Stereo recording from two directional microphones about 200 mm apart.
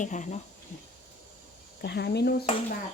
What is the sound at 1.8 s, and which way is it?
Speech, 55° left (ahead or behind).